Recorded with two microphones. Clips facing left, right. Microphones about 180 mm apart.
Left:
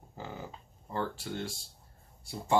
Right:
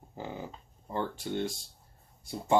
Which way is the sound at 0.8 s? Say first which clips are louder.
Right 2 dB; 20° right (ahead or behind).